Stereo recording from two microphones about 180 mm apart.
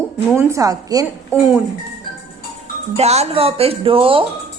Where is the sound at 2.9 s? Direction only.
35° right (ahead or behind).